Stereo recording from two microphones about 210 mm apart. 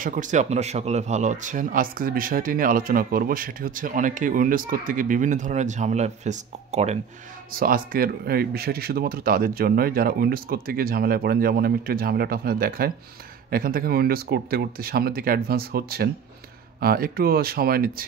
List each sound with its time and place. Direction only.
0.0 s speech: 40° right (ahead or behind)
7.5 s speech: 40° right (ahead or behind)